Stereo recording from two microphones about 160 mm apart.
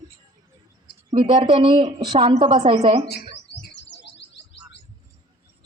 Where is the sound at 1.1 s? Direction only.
35° right (ahead or behind).